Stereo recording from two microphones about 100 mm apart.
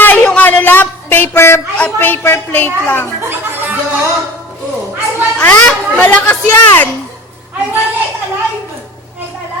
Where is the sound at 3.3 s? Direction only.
20° right (ahead or behind).